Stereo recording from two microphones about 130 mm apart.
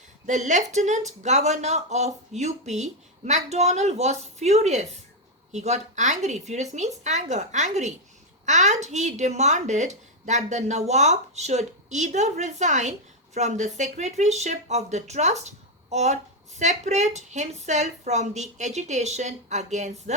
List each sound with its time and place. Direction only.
0.3 s speech: 70° right (ahead or behind)